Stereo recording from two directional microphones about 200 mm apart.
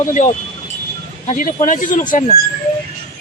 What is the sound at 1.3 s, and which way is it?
Speech, 40° left (ahead or behind).